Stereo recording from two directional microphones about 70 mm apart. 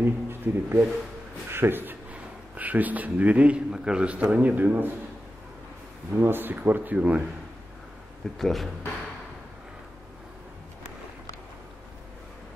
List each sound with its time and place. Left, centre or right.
0.0 s a man's voice: right
6.1 s a man's voice: right
8.4 s speech: centre